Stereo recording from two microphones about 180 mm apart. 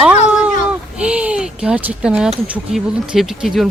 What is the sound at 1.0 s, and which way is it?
Speech, 5° right (ahead or behind).